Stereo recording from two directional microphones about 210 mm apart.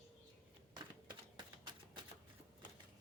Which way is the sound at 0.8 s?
20° right (ahead or behind).